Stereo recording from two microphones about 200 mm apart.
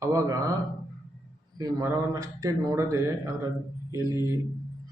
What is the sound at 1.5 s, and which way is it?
Speech, 15° right (ahead or behind).